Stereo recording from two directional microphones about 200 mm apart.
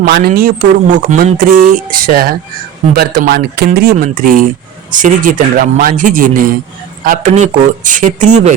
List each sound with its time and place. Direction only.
0.0 s a man's voice: 50° right (ahead or behind)